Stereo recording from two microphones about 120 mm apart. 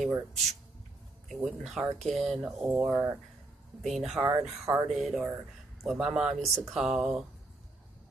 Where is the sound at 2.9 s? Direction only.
20° right (ahead or behind).